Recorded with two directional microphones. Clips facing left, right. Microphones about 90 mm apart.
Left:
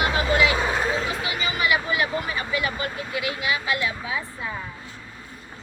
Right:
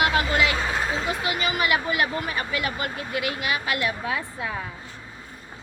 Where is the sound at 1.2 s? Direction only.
55° right (ahead or behind).